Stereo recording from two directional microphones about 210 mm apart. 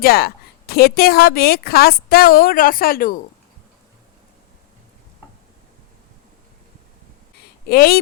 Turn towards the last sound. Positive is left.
turn(degrees=45)  # may be behind; listen again after turning